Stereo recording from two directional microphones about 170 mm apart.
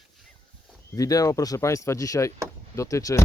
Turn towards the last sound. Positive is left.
turn(degrees=20)  # may be behind; listen again after turning